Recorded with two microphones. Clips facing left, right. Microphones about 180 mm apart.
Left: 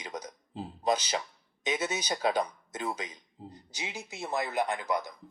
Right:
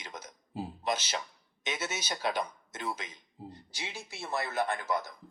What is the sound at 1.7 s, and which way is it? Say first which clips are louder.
Speech: left 5 dB; 15° left (ahead or behind).